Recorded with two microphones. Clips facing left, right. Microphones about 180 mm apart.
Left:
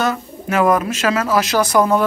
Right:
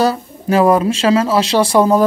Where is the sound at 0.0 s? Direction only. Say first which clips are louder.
Right 5 dB; 35° right (ahead or behind).